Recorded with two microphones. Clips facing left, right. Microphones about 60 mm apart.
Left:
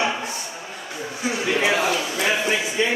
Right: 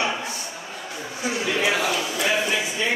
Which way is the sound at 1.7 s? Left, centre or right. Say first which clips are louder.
Left 2 dB; centre.